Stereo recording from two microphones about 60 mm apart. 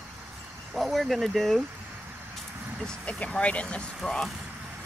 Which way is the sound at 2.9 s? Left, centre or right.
Centre.